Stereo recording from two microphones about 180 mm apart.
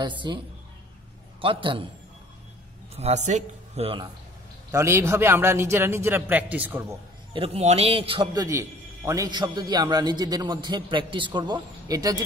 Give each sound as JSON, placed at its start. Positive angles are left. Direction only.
{"t": 0.0, "sound": "a man's voice", "side_deg": -25}
{"t": 1.4, "sound": "a man's voice", "side_deg": -30}
{"t": 3.0, "sound": "speech", "side_deg": -40}
{"t": 4.6, "sound": "a man's voice", "side_deg": -15}
{"t": 7.3, "sound": "a man's voice", "side_deg": -35}